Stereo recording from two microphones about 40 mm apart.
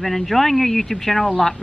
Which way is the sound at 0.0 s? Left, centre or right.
Centre.